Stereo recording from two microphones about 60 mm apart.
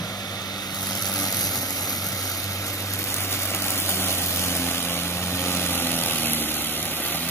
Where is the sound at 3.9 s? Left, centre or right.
Left.